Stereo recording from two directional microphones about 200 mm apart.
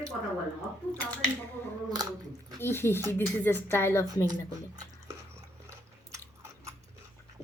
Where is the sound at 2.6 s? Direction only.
10° left (ahead or behind).